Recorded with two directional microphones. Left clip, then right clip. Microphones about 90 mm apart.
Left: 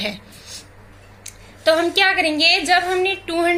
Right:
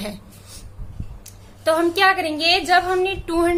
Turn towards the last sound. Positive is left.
turn(degrees=-40)  # may be behind; listen again after turning